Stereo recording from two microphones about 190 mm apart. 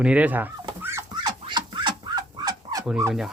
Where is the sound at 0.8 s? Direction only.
15° right (ahead or behind).